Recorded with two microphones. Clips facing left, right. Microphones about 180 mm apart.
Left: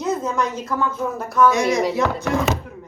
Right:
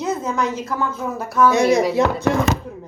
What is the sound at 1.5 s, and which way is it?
Speech, 30° right (ahead or behind).